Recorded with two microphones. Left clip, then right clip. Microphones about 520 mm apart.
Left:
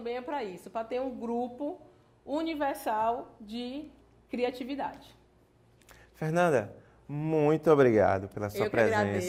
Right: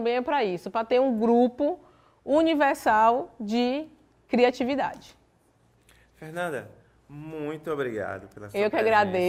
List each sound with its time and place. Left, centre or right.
0.0 s a woman's voice: right
6.1 s speech: left
8.5 s a woman's voice: right